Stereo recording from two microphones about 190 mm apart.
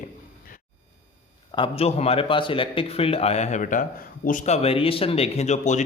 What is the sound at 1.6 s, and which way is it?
A man's voice, 30° left (ahead or behind).